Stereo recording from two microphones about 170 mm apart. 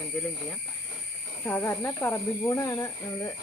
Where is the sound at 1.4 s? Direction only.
15° left (ahead or behind).